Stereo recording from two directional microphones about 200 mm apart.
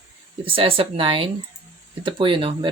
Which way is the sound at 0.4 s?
25° right (ahead or behind).